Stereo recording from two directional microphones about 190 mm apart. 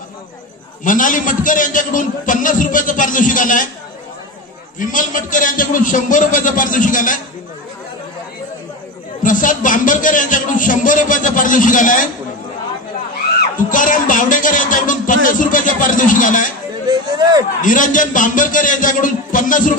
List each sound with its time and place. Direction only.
0.8 s a man's voice: 45° left (ahead or behind)
4.7 s a man's voice: 45° left (ahead or behind)
9.2 s a man's voice: 45° left (ahead or behind)
13.4 s a man's voice: 45° left (ahead or behind)
16.8 s speech: 20° right (ahead or behind)
17.6 s a man's voice: 45° left (ahead or behind)